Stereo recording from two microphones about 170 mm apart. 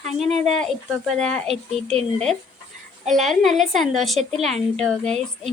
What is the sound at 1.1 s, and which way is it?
Speech, 40° right (ahead or behind).